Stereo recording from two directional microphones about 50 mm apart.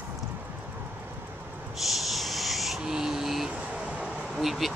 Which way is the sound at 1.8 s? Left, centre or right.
Centre.